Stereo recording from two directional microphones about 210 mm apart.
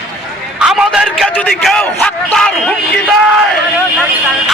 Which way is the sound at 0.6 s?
Centre (ahead or behind).